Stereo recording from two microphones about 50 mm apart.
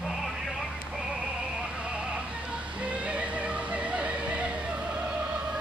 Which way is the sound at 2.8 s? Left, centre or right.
Right.